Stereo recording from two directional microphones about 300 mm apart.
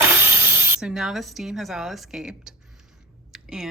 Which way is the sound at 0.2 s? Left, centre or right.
Centre.